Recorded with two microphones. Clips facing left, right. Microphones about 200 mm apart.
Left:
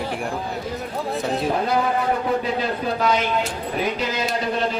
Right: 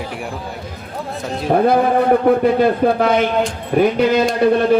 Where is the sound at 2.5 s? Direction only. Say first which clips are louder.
Right 10 dB; 55° right (ahead or behind).